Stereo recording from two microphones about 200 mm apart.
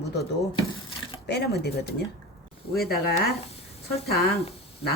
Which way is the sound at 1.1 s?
55° left (ahead or behind).